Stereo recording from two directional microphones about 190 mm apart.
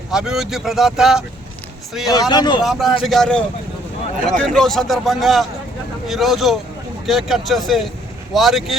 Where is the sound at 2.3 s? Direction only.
20° left (ahead or behind).